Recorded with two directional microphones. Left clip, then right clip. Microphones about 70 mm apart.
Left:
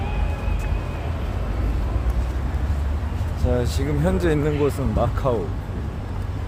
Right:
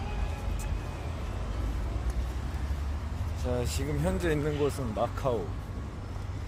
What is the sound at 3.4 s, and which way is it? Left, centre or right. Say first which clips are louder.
Speech: left 8 dB; centre.